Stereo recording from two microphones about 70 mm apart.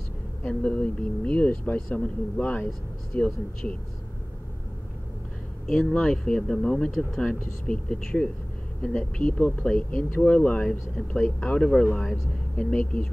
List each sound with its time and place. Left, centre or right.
0.4 s speech: centre
5.7 s speech: centre
11.0 s speech: centre